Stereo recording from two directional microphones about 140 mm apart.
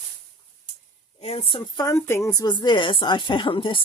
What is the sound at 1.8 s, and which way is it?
A woman's voice, 20° left (ahead or behind).